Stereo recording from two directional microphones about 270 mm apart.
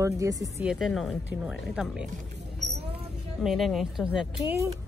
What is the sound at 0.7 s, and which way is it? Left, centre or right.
A woman's voice, centre.